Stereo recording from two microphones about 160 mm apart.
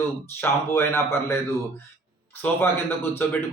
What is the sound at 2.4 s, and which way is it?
Speech, 15° left (ahead or behind).